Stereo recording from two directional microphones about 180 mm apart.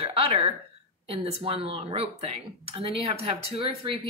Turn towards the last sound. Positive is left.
turn(degrees=-30)  # may be behind; listen again after turning